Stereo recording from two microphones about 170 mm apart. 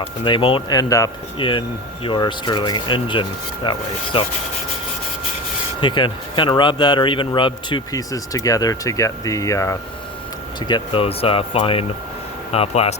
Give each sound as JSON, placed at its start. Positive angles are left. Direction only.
{"t": 0.3, "sound": "speech", "side_deg": 30}
{"t": 5.8, "sound": "speech", "side_deg": 25}
{"t": 10.7, "sound": "speech", "side_deg": 30}